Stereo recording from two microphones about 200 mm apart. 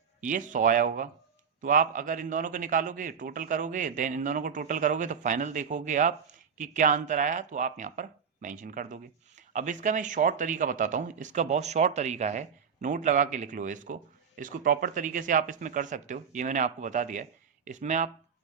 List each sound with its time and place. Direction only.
0.3 s speech: 40° right (ahead or behind)